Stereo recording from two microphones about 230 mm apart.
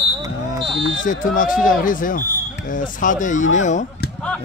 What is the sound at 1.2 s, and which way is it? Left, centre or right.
Speech, left.